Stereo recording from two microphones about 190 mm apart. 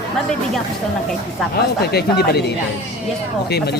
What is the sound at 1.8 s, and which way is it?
Speech, 60° left (ahead or behind).